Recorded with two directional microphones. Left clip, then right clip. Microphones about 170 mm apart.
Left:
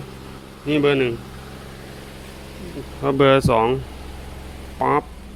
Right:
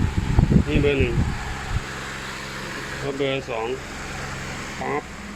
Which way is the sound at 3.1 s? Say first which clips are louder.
Left 11 dB; 50° left (ahead or behind).